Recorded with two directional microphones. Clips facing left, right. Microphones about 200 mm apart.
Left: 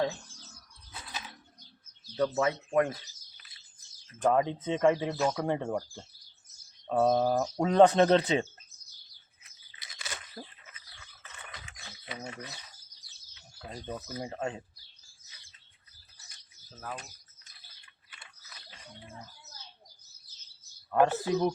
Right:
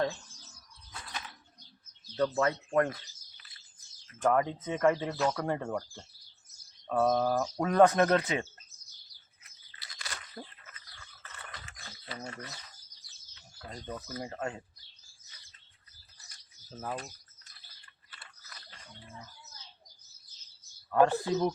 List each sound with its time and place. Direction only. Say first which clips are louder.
2.1 s speech: even; 10° left (ahead or behind)
4.1 s speech: left 1 dB; 20° left (ahead or behind)
7.6 s speech: left 2 dB; 25° left (ahead or behind)
9.7 s a sound: left 1 dB; 20° left (ahead or behind)
10.4 s a sound: even; 5° left (ahead or behind)
13.6 s speech: left 2 dB; 10° left (ahead or behind)
20.9 s speech: even; 15° left (ahead or behind)